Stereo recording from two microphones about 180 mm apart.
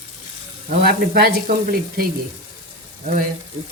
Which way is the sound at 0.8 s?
60° right (ahead or behind).